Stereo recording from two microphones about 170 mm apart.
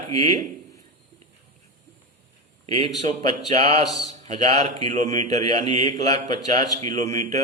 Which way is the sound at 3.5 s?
40° right (ahead or behind).